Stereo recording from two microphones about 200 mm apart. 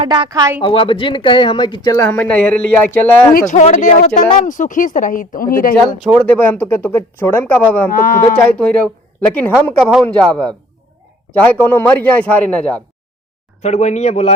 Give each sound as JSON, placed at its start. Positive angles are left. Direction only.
{"t": 0.1, "sound": "speech", "side_deg": -20}
{"t": 0.6, "sound": "speech", "side_deg": 25}
{"t": 3.3, "sound": "speech", "side_deg": 35}
{"t": 6.0, "sound": "speech", "side_deg": 5}
{"t": 7.9, "sound": "speech", "side_deg": 45}
{"t": 8.2, "sound": "a man's voice", "side_deg": 10}
{"t": 11.6, "sound": "speech", "side_deg": 10}
{"t": 13.6, "sound": "speech", "side_deg": 35}